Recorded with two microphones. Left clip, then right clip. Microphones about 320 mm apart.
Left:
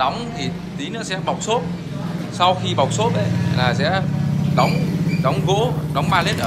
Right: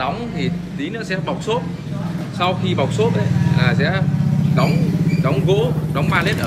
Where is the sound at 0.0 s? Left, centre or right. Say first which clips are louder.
Left 2 dB; centre.